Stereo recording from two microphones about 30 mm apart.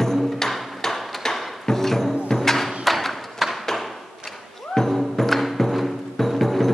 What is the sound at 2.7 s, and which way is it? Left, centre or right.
Thump, centre.